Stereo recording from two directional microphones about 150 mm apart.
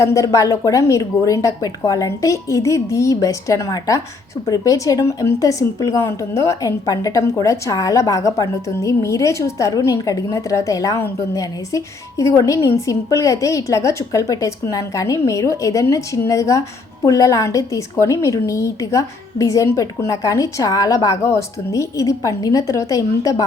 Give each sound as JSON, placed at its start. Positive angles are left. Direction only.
{"t": 0.0, "sound": "a woman's voice", "side_deg": 20}